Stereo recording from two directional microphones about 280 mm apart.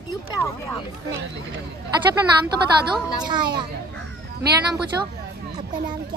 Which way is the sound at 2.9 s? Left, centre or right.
Centre.